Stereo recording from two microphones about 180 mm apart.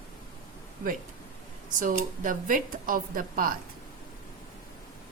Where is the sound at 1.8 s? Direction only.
45° right (ahead or behind).